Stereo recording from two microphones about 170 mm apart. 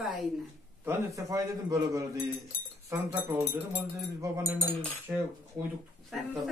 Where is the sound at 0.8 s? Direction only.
15° right (ahead or behind).